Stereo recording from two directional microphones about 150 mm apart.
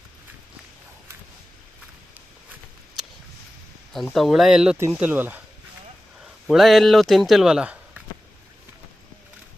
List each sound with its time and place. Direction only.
4.1 s speech: centre (ahead or behind)
6.5 s speech: centre (ahead or behind)